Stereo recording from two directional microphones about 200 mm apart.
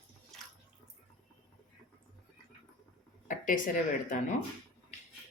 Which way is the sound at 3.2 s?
40° left (ahead or behind).